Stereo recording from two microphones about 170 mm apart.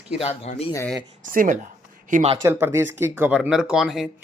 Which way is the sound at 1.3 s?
55° right (ahead or behind).